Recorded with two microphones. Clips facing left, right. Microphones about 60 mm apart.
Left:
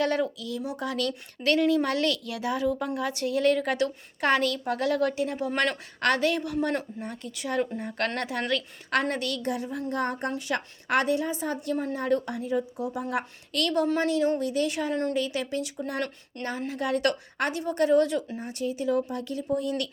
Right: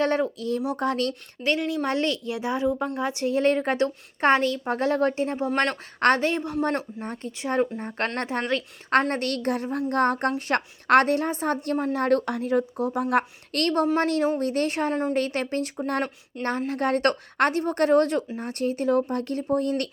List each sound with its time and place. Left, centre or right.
0.0 s a woman's voice: right
1.5 s a woman's voice: centre; by 19.9 s right